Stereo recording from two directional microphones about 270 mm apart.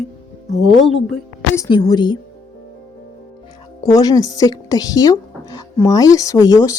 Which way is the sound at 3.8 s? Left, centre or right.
Centre.